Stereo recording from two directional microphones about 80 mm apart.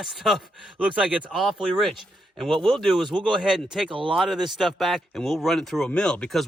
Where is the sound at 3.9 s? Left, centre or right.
Right.